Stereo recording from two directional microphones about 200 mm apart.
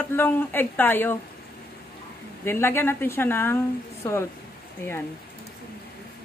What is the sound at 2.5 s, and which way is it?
A woman's voice, 10° left (ahead or behind).